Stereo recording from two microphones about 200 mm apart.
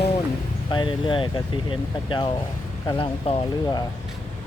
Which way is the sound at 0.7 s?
25° left (ahead or behind).